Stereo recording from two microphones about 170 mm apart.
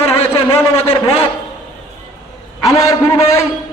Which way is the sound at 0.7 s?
35° left (ahead or behind).